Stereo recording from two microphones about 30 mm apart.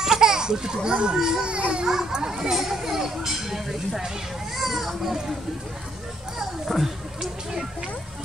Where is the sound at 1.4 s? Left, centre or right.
Right.